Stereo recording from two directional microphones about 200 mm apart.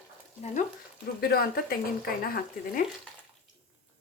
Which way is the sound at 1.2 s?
50° left (ahead or behind).